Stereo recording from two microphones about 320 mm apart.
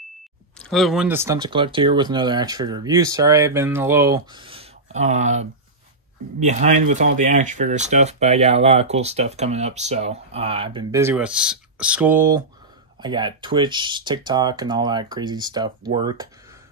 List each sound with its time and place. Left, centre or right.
0.6 s speech: centre